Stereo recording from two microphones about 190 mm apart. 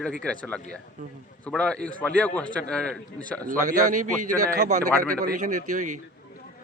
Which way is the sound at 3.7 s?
45° right (ahead or behind).